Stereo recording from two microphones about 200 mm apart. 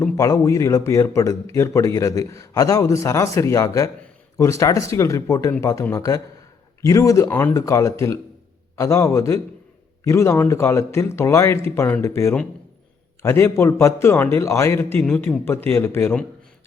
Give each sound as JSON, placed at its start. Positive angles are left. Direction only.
{"t": 0.0, "sound": "a man's voice", "side_deg": 15}